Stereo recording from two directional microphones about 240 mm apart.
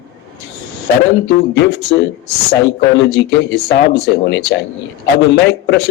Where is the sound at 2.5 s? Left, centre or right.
Left.